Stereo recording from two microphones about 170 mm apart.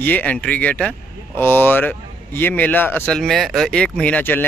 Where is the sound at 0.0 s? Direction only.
10° left (ahead or behind).